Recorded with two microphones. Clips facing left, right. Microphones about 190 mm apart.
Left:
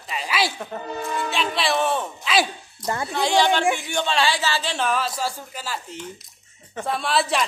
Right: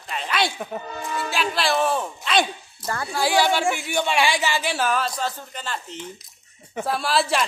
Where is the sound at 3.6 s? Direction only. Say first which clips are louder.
Left 2 dB; 15° left (ahead or behind).